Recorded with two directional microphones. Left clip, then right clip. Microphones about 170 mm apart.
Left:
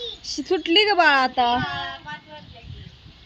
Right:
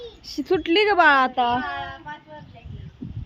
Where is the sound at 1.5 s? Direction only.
60° left (ahead or behind).